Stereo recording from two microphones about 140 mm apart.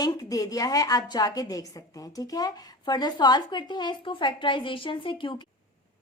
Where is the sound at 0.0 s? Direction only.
25° left (ahead or behind).